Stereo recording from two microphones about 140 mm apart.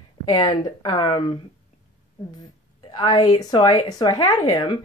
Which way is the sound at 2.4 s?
30° left (ahead or behind).